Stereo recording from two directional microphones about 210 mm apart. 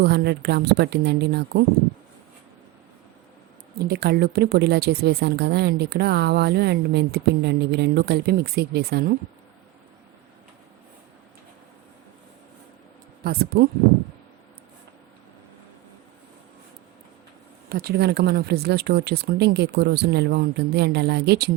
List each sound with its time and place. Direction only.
0.0 s a woman's voice: 50° right (ahead or behind)
3.8 s a woman's voice: 50° right (ahead or behind)
13.2 s a woman's voice: 45° right (ahead or behind)
17.7 s a woman's voice: 45° right (ahead or behind)